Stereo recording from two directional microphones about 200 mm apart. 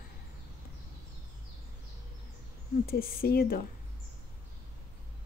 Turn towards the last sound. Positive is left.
turn(degrees=50)  # may be behind; listen again after turning